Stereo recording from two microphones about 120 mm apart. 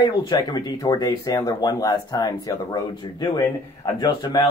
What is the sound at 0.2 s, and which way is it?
Speech, 35° left (ahead or behind).